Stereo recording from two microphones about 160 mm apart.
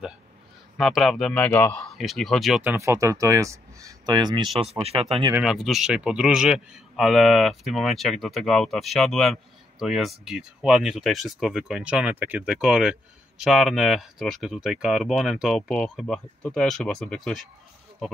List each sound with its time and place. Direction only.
0.7 s a man's voice: centre (ahead or behind)
1.9 s a man's voice: centre (ahead or behind)
2.6 s speech: 15° right (ahead or behind); by 5.2 s 40° right (ahead or behind)
5.3 s a man's voice: centre (ahead or behind)